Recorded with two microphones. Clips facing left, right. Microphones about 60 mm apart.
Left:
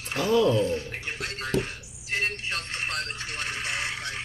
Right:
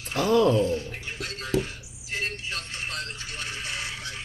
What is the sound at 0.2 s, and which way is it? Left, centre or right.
Speech, right.